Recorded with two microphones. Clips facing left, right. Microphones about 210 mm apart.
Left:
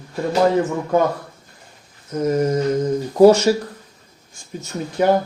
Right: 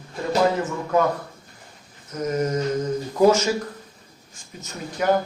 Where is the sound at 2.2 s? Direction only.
30° left (ahead or behind).